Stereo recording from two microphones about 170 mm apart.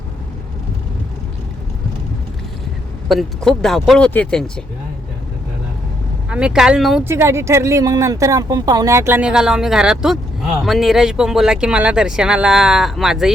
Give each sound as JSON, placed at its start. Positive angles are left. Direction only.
{"t": 3.1, "sound": "speech", "side_deg": 0}
{"t": 6.2, "sound": "speech", "side_deg": -5}
{"t": 7.0, "sound": "speech", "side_deg": -15}